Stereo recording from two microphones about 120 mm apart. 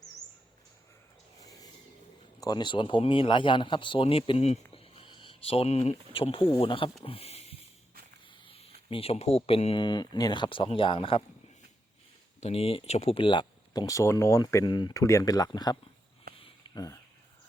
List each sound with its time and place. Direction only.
2.4 s a man's voice: 35° left (ahead or behind); by 6.0 s 65° left (ahead or behind)
6.1 s speech: 50° left (ahead or behind)
8.3 s a sound: 50° left (ahead or behind)
9.7 s speech: 40° left (ahead or behind)
12.4 s speech: 55° left (ahead or behind); by 17.0 s 30° left (ahead or behind)